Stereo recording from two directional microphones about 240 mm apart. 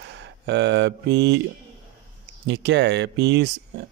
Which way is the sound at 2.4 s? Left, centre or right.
Right.